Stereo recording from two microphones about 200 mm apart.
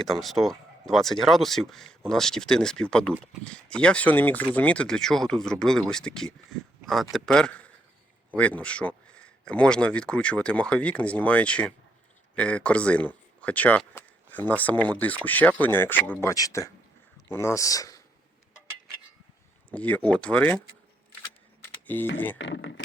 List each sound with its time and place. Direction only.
0.0 s speech: centre (ahead or behind); by 18.0 s 15° left (ahead or behind)
19.7 s speech: 5° left (ahead or behind)
21.6 s camera: 10° left (ahead or behind)
22.4 s speech: 65° left (ahead or behind)